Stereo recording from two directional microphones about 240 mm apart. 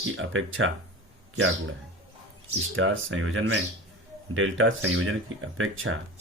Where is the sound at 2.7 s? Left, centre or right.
Right.